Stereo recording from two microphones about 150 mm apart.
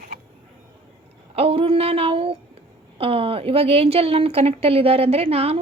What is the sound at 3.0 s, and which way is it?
A woman's voice, 40° right (ahead or behind).